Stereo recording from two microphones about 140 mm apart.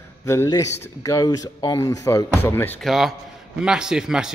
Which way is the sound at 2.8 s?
Centre (ahead or behind).